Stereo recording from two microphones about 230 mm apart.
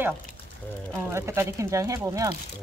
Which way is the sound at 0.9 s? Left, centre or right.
Centre.